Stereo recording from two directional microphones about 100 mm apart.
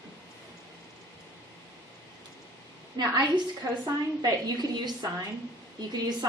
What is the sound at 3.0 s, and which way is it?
A woman's voice, 50° right (ahead or behind).